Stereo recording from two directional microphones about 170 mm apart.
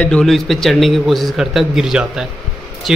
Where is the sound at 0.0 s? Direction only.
5° left (ahead or behind).